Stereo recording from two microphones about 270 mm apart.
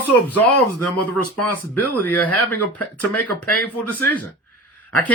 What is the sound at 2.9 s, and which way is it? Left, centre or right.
Speech, left.